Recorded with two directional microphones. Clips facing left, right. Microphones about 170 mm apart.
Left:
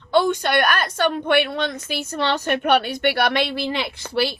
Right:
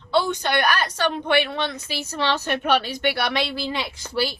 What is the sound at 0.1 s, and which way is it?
A woman's voice, 50° left (ahead or behind).